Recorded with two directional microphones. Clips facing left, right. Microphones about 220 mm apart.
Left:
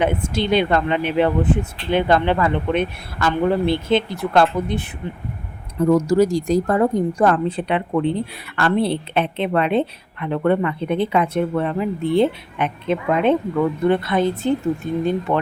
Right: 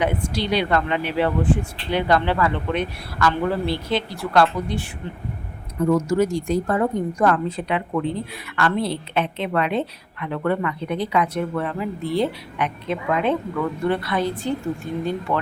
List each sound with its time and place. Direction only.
0.0 s speech: 25° left (ahead or behind)
5.9 s speech: 35° left (ahead or behind)